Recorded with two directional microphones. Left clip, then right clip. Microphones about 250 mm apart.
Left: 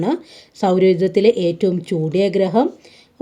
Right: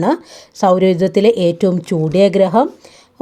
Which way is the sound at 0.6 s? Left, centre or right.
Right.